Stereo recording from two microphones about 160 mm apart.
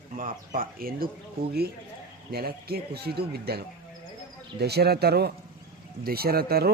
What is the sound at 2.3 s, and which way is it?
Speech, 75° right (ahead or behind).